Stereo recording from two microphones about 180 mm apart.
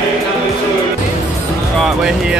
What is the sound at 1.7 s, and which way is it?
Music, centre (ahead or behind).